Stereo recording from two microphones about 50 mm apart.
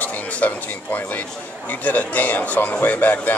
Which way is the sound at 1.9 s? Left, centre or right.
Left.